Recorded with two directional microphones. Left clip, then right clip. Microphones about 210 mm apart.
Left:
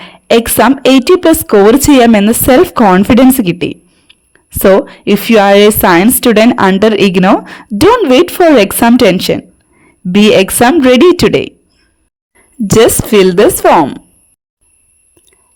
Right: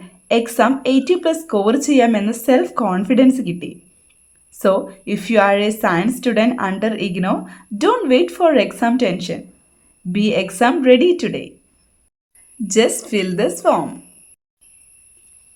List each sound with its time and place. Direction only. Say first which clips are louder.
0.0 s a woman's voice: left 9 dB; 45° left (ahead or behind)
12.6 s a woman's voice: left 9 dB; 45° left (ahead or behind)